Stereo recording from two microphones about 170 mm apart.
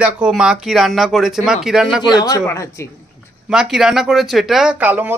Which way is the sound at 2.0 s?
25° left (ahead or behind).